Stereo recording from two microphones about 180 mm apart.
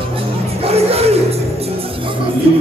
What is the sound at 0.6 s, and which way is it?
Music, 35° right (ahead or behind).